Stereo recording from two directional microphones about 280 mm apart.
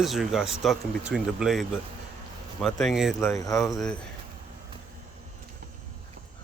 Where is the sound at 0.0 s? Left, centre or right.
Centre.